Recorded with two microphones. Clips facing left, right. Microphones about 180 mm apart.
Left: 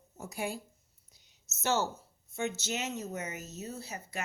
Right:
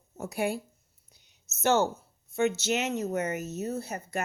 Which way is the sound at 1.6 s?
60° right (ahead or behind).